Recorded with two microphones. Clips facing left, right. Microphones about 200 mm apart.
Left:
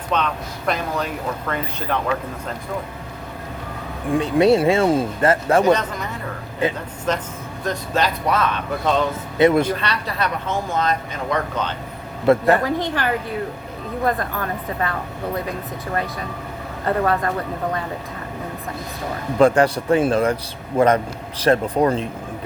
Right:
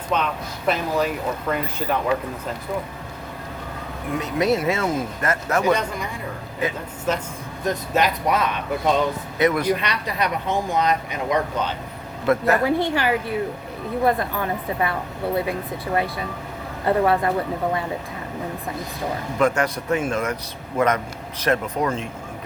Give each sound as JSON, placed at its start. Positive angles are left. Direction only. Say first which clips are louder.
{"t": 0.1, "sound": "speech", "louder": "left 1 dB", "side_deg": -10}
{"t": 4.1, "sound": "speech", "louder": "left 6 dB", "side_deg": 30}
{"t": 7.1, "sound": "speech", "louder": "left 1 dB", "side_deg": -10}
{"t": 9.4, "sound": "speech", "louder": "left 4 dB", "side_deg": 25}
{"t": 9.7, "sound": "speech", "louder": "left 1 dB", "side_deg": -15}
{"t": 12.2, "sound": "speech", "louder": "left 4 dB", "side_deg": 30}
{"t": 12.9, "sound": "speech", "louder": "right 1 dB", "side_deg": -10}
{"t": 16.8, "sound": "speech", "louder": "right 1 dB", "side_deg": -15}
{"t": 19.4, "sound": "a man's voice", "louder": "left 6 dB", "side_deg": 30}